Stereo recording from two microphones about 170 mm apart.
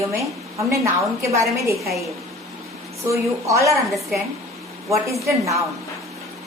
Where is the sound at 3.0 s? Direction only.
15° right (ahead or behind).